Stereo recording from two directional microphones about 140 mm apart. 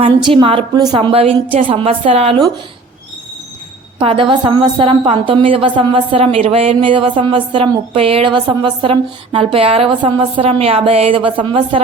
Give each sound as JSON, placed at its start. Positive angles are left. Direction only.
{"t": 0.0, "sound": "a woman's voice", "side_deg": -35}
{"t": 3.9, "sound": "a woman's voice", "side_deg": -40}